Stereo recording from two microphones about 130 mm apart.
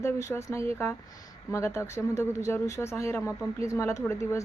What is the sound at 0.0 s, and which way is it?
Speech, 20° left (ahead or behind).